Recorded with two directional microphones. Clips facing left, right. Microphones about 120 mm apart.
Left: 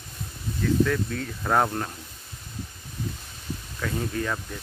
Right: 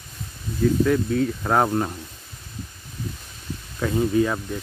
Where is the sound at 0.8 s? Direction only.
10° right (ahead or behind).